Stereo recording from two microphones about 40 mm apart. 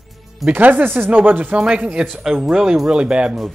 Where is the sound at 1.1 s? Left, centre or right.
Right.